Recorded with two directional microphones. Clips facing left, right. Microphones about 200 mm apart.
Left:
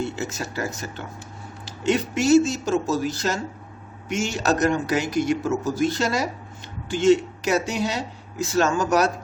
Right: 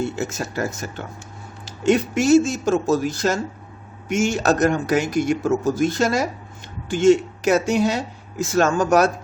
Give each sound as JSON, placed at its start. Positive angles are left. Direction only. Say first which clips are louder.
{"t": 0.0, "sound": "speech", "louder": "right 3 dB", "side_deg": -50}